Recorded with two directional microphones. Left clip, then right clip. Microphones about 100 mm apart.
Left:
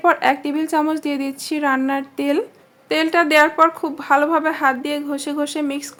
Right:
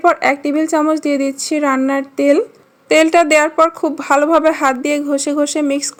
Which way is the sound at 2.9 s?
75° right (ahead or behind).